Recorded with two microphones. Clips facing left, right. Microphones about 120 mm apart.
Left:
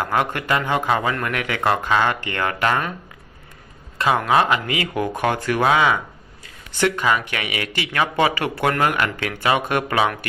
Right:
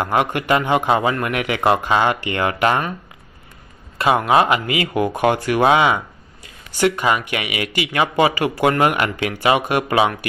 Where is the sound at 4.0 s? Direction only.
15° right (ahead or behind).